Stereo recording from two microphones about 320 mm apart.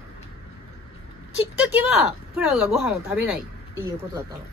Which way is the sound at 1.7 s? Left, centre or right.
Centre.